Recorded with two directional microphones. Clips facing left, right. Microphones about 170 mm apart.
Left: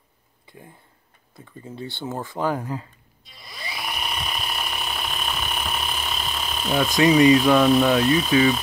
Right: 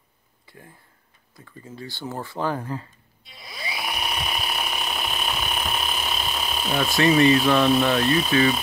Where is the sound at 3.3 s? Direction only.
5° right (ahead or behind).